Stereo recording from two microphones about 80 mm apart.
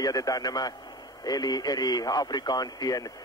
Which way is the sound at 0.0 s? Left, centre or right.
Left.